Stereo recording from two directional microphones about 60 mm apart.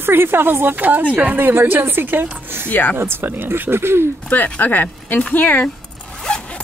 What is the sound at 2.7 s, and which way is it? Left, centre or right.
Speech, left.